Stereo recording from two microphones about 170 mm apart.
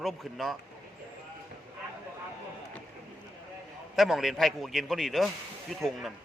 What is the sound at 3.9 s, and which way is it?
A man's voice, centre (ahead or behind).